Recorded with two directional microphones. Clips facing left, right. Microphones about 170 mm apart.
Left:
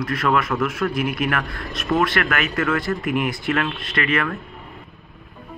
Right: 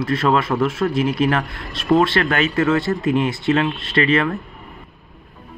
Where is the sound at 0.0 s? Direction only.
25° right (ahead or behind).